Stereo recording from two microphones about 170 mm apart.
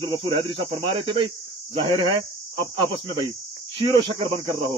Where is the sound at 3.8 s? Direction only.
30° right (ahead or behind).